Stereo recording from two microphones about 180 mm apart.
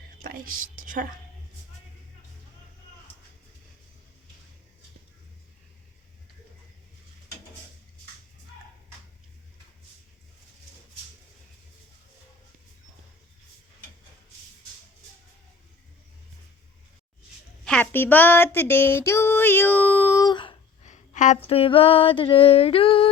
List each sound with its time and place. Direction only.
0.2 s a woman's voice: 50° right (ahead or behind)
17.7 s female singing: 10° left (ahead or behind); by 20.6 s 25° left (ahead or behind)
20.8 s a sound: 40° left (ahead or behind)